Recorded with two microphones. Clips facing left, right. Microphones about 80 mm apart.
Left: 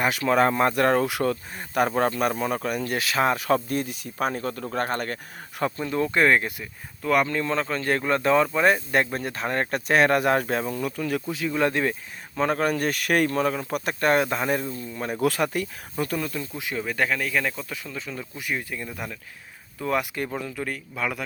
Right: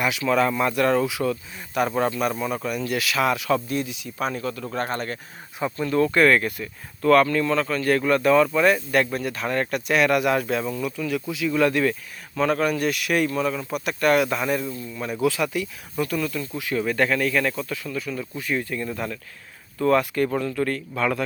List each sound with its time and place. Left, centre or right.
0.0 s speech: left
5.7 s speech: left
16.8 s speech: centre